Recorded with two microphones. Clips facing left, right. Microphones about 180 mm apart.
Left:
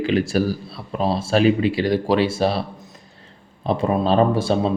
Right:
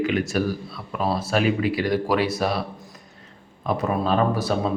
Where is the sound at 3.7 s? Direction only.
30° left (ahead or behind).